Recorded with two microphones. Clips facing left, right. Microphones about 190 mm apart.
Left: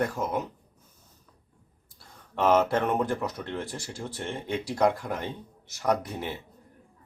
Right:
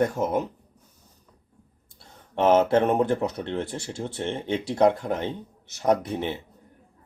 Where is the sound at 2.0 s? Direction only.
25° right (ahead or behind).